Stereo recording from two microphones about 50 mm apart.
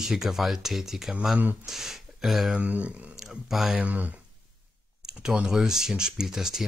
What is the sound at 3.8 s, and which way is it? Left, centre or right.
Speech, right.